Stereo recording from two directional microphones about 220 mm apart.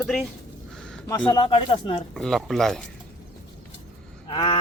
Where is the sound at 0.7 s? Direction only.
Centre (ahead or behind).